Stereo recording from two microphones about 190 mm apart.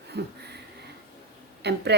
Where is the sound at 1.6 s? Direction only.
60° right (ahead or behind).